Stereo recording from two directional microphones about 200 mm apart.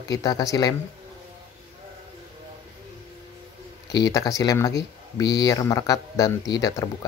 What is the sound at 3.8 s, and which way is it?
Speech, 20° left (ahead or behind).